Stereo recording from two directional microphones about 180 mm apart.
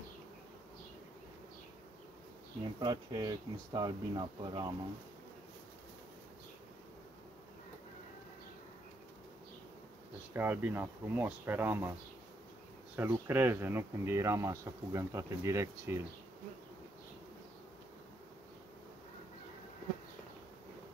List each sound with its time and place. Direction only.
2.8 s speech: 25° right (ahead or behind)
10.3 s speech: 10° right (ahead or behind)
12.9 s speech: 15° right (ahead or behind)